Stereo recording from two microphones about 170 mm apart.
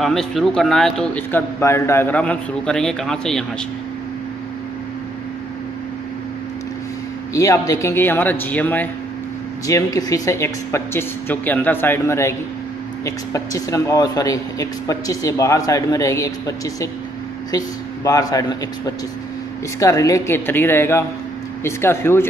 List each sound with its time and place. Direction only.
0.0 s a man's voice: centre (ahead or behind)
7.3 s speech: 20° left (ahead or behind)
9.7 s speech: 20° left (ahead or behind)